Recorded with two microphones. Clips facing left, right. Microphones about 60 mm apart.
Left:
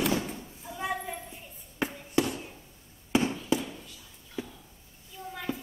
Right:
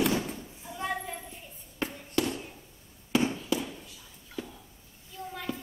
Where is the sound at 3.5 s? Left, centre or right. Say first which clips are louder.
Left 4 dB; left.